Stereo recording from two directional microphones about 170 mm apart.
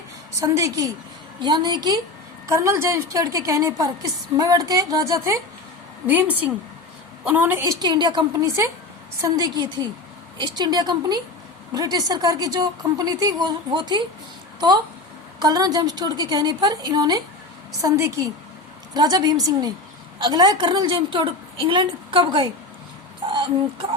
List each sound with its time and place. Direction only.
0.3 s a woman's voice: 20° right (ahead or behind)
7.3 s a woman's voice: 15° right (ahead or behind); by 14.0 s 30° right (ahead or behind)
15.4 s a woman's voice: 25° right (ahead or behind)